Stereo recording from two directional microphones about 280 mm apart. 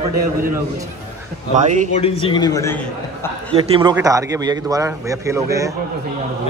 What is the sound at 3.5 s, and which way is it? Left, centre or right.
A man's voice, centre.